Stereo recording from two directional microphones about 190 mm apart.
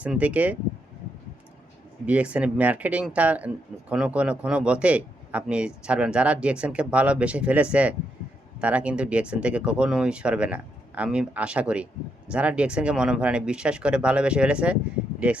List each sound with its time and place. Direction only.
0.0 s speech: 5° right (ahead or behind)
2.0 s speech: 5° right (ahead or behind)